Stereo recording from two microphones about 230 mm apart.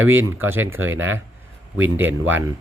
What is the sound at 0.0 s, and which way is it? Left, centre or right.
Speech, right.